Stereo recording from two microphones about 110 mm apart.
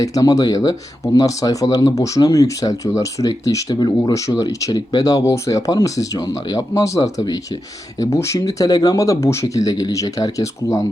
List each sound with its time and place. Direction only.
0.0 s speech: 35° left (ahead or behind)